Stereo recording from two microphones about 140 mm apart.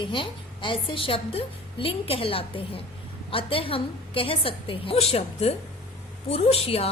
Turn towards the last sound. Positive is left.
turn(degrees=45)  # may be behind; listen again after turning